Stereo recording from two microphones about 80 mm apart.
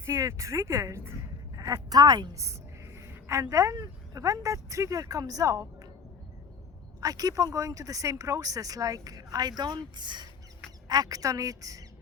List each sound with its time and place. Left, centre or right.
0.0 s speech: right
2.3 s a sound: right
3.5 s speech: right
7.0 s speech: right
10.8 s speech: right